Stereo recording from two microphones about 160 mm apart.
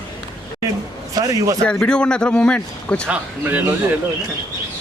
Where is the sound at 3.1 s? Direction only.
10° right (ahead or behind).